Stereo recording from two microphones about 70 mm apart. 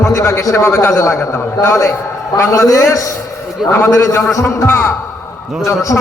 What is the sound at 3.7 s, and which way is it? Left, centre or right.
A man's voice, left.